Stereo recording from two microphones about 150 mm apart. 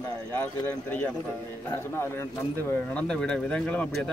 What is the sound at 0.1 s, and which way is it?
Speech, 15° left (ahead or behind).